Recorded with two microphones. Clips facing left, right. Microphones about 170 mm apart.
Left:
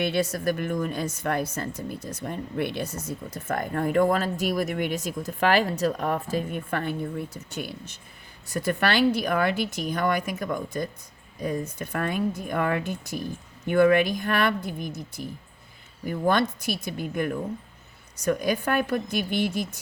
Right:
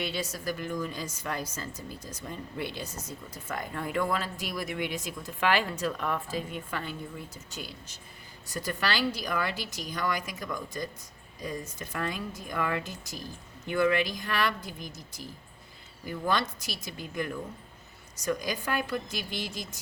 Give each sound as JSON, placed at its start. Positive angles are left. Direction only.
{"t": 0.0, "sound": "a woman's voice", "side_deg": 60}